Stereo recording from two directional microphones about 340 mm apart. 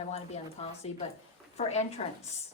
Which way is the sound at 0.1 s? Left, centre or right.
Centre.